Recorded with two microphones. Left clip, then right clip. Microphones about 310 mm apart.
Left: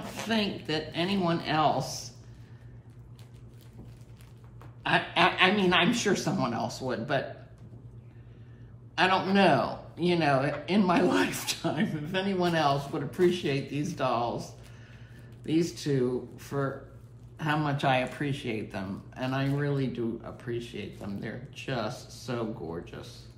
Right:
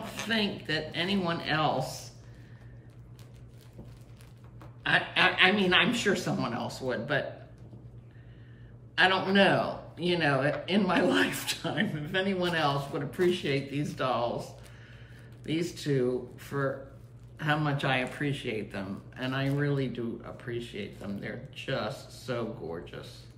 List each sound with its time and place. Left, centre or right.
0.3 s speech: centre
4.8 s speech: centre
8.9 s speech: centre
17.6 s speech: centre